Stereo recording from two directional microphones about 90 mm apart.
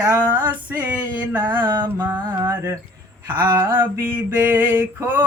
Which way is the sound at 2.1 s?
45° right (ahead or behind).